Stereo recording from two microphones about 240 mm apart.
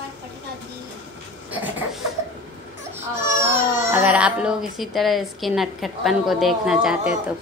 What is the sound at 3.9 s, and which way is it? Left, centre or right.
A woman's voice, centre.